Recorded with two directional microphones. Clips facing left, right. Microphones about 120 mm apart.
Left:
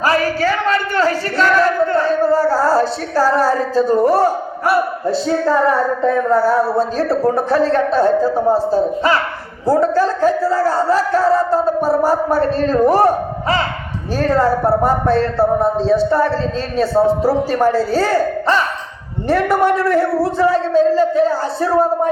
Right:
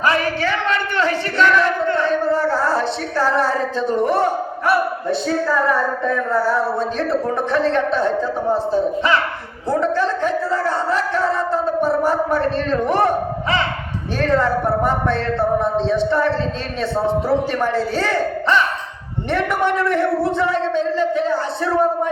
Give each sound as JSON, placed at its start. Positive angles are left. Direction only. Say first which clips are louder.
{"t": 0.0, "sound": "speech", "louder": "left 3 dB", "side_deg": 40}